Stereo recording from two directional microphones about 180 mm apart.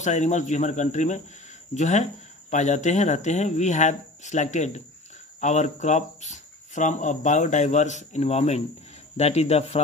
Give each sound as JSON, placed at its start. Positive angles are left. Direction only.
{"t": 0.0, "sound": "speech", "side_deg": 40}